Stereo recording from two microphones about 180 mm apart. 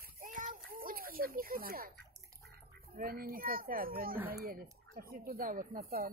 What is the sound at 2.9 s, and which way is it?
Speech, 55° right (ahead or behind).